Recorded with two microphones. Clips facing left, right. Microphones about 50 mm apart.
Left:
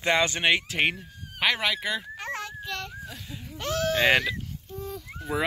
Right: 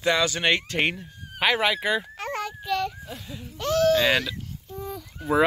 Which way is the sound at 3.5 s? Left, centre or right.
Left.